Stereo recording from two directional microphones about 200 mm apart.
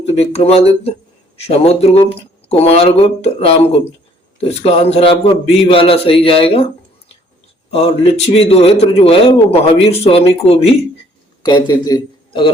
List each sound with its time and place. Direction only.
0.0 s a man's voice: 30° left (ahead or behind)
7.7 s a man's voice: 30° left (ahead or behind)